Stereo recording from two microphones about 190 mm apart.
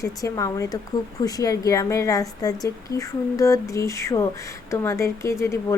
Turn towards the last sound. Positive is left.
turn(degrees=15)  # may be behind; listen again after turning